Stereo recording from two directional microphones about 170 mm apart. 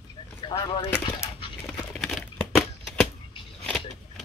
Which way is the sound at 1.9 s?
Centre (ahead or behind).